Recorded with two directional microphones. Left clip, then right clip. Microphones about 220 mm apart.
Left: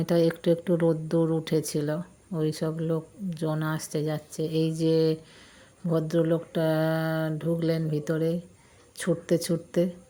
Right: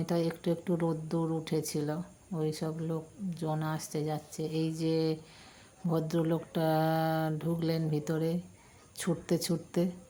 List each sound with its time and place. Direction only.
0.0 s speech: 20° left (ahead or behind)